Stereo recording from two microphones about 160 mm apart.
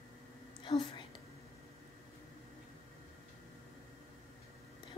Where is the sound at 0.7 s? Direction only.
30° left (ahead or behind).